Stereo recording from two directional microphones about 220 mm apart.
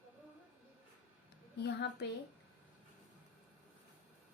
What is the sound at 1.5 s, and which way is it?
Speech, 50° left (ahead or behind).